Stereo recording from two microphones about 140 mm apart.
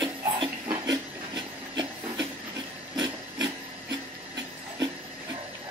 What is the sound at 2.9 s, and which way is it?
Wood, 25° right (ahead or behind).